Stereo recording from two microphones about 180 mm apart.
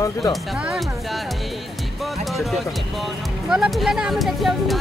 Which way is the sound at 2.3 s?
Centre (ahead or behind).